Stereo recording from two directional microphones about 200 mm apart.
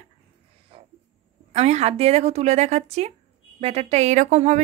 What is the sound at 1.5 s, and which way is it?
A woman's voice, 35° right (ahead or behind).